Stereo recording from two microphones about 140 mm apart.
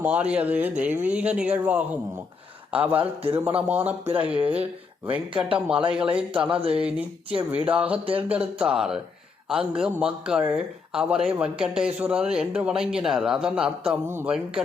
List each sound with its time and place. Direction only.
0.0 s speech: 10° right (ahead or behind)
14.1 s speech: 15° right (ahead or behind)